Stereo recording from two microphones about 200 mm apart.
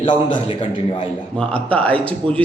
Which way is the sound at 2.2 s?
25° right (ahead or behind).